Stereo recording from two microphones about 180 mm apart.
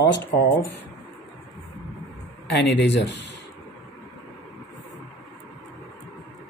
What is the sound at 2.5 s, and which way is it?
Speech, 75° left (ahead or behind).